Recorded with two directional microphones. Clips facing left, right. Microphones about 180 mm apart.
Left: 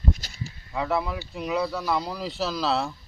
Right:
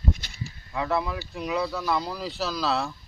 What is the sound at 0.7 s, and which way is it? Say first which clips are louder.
Speech: even; 15° left (ahead or behind).